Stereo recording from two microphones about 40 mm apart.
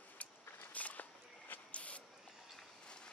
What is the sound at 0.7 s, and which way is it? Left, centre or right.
Walk, left.